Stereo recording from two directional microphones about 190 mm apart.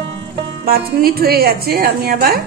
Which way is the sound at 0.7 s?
50° right (ahead or behind).